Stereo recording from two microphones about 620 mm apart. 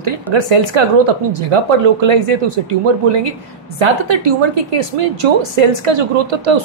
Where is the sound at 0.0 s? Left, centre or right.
Right.